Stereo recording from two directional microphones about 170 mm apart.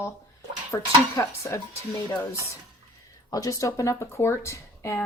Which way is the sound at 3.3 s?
20° left (ahead or behind).